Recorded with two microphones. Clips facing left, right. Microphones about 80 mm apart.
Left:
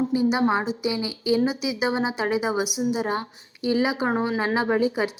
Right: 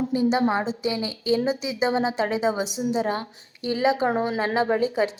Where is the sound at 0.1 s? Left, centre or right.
Centre.